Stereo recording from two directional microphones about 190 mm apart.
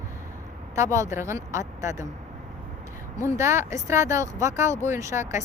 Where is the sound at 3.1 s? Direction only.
15° right (ahead or behind).